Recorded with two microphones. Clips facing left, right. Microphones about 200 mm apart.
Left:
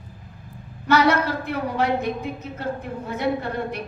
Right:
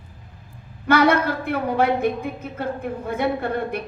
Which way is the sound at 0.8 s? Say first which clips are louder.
Right 2 dB; 55° right (ahead or behind).